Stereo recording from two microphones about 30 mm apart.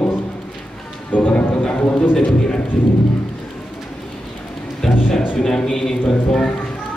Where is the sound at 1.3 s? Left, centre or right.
Left.